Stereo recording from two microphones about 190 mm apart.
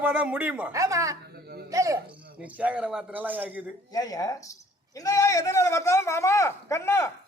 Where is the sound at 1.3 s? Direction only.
55° right (ahead or behind).